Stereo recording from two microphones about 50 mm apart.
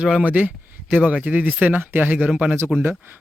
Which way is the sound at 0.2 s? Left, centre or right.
Right.